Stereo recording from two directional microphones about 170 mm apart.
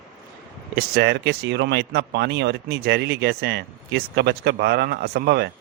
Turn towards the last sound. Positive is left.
turn(degrees=-70)  # may be behind; listen again after turning